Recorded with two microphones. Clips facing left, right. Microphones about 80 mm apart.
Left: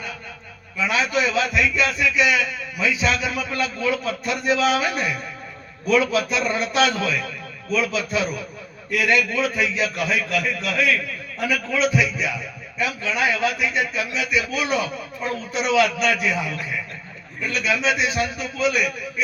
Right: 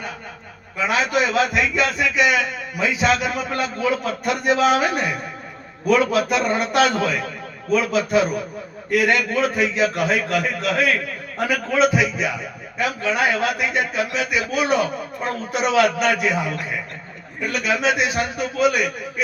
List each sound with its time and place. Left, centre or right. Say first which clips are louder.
0.8 s a man's voice: right 2 dB; right